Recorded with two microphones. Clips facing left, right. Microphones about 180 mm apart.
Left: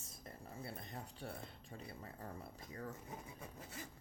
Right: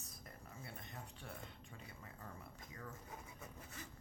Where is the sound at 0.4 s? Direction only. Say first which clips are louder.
Left 5 dB; 35° left (ahead or behind).